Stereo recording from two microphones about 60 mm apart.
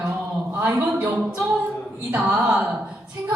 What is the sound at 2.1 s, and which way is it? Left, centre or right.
Speech, centre.